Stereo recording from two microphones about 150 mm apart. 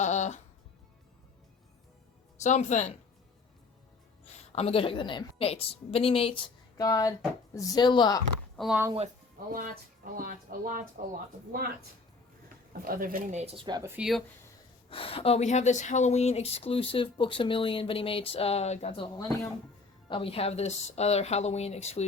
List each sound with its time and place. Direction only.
0.0 s music: 50° left (ahead or behind)
2.4 s speech: 50° left (ahead or behind)
4.5 s speech: 40° left (ahead or behind)
6.7 s speech: 25° left (ahead or behind)
8.5 s speech: centre (ahead or behind)
9.5 s speech: 70° right (ahead or behind)
12.8 s speech: 70° right (ahead or behind)
13.3 s speech: 45° right (ahead or behind)
13.7 s speech: 25° right (ahead or behind)
13.9 s speech: 5° right (ahead or behind)
14.8 s speech: 40° left (ahead or behind)
20.1 s speech: 35° left (ahead or behind)